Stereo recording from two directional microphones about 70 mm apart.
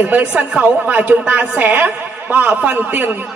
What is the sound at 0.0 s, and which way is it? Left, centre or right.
A man's voice, right.